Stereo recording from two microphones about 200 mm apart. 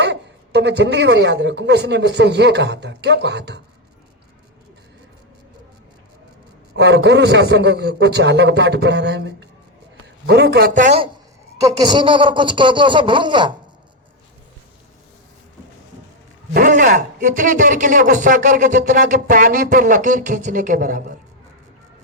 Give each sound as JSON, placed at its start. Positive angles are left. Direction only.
{"t": 0.0, "sound": "a woman's voice", "side_deg": -60}
{"t": 6.7, "sound": "a woman's voice", "side_deg": -60}
{"t": 10.8, "sound": "speech", "side_deg": -40}
{"t": 11.6, "sound": "speech", "side_deg": -20}
{"t": 16.6, "sound": "speech", "side_deg": -40}